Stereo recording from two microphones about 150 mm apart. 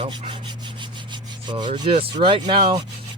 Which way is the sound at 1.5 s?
30° right (ahead or behind).